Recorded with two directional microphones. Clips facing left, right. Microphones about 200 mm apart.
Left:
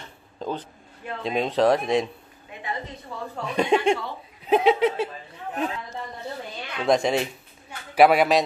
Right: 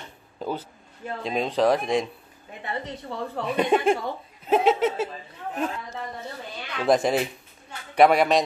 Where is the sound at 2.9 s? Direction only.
70° right (ahead or behind).